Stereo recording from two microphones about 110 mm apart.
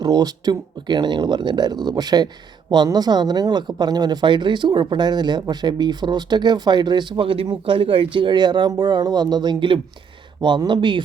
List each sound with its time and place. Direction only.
0.0 s speech: 35° right (ahead or behind)